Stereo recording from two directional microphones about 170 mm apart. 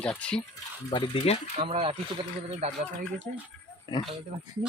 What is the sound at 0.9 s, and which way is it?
Speech, 30° left (ahead or behind).